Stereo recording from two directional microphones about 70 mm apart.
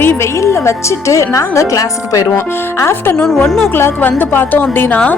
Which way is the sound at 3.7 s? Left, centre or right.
Left.